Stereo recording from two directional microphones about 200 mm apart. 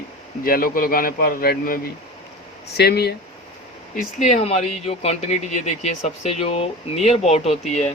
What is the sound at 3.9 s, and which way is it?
Speech, 35° left (ahead or behind).